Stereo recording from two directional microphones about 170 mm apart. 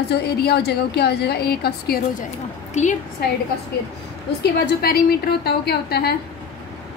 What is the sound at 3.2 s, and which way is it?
Speech, 65° left (ahead or behind).